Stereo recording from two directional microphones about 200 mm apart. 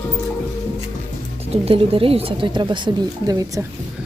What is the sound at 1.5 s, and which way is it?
Speech, 30° right (ahead or behind).